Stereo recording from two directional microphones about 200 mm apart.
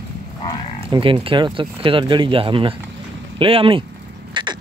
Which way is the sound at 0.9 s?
25° right (ahead or behind).